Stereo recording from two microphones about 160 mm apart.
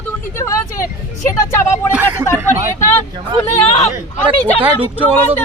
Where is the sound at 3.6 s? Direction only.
40° left (ahead or behind).